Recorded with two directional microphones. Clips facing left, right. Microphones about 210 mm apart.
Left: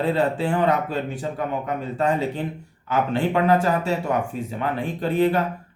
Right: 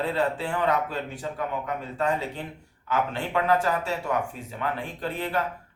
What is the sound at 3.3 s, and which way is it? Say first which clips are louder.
A man's voice: left 3 dB; 25° left (ahead or behind).